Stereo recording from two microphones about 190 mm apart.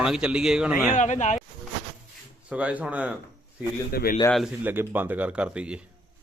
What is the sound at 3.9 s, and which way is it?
Speech, 55° left (ahead or behind).